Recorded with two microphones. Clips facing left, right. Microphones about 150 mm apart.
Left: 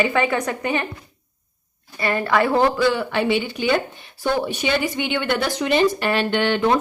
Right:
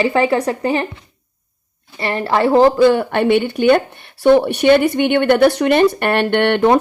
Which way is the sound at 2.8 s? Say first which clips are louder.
Right 7 dB; 50° right (ahead or behind).